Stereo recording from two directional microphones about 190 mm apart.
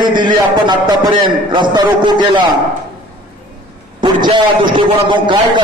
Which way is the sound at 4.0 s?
25° right (ahead or behind).